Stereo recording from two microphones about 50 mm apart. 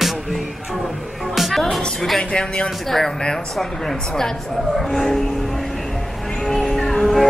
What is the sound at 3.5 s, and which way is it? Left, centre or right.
Speech, centre.